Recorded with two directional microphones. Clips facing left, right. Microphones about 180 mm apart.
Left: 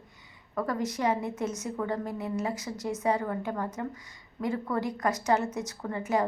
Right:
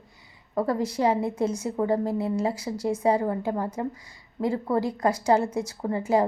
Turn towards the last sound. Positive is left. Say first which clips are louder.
# right 5 dB
turn(degrees=-30)  # may be behind; listen again after turning